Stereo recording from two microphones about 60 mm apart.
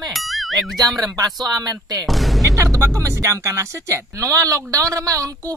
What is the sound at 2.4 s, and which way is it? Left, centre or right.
Speech, right.